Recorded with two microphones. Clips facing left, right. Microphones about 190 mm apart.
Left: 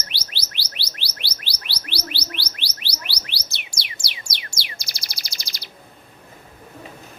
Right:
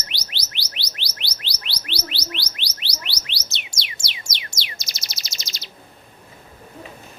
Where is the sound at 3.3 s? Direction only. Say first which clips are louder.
Right 1 dB; 20° right (ahead or behind).